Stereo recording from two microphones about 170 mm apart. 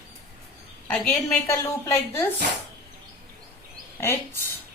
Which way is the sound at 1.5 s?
15° left (ahead or behind).